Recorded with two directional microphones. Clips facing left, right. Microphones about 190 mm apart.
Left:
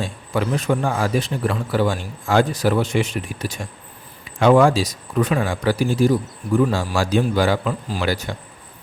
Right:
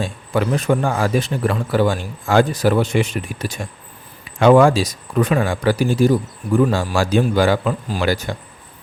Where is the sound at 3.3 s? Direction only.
70° right (ahead or behind).